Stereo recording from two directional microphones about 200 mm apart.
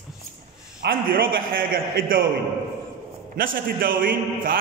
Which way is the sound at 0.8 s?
45° right (ahead or behind).